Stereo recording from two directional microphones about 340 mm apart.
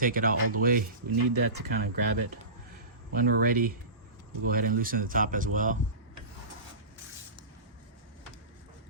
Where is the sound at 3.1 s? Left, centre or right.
Right.